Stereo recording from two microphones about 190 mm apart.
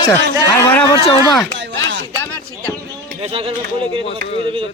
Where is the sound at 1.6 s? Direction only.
70° right (ahead or behind).